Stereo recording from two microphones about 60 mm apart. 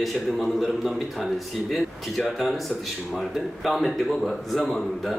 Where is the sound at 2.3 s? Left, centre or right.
Centre.